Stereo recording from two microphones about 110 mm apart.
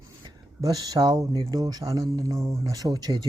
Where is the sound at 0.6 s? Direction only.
35° right (ahead or behind).